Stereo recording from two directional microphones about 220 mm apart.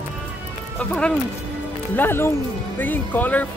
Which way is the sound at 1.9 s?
10° left (ahead or behind).